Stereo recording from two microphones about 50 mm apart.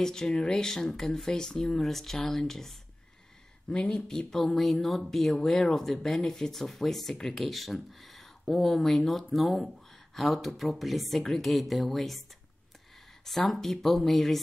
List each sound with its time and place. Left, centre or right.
0.0 s speech: centre
3.9 s speech: centre